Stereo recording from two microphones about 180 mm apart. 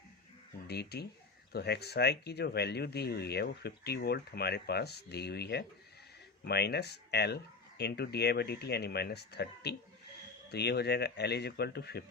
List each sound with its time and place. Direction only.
0.7 s speech: 65° left (ahead or behind)